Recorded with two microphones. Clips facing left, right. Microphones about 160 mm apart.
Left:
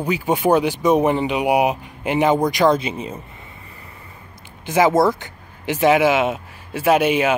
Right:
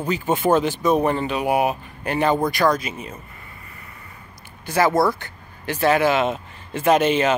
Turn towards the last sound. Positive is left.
turn(degrees=10)  # may be behind; listen again after turning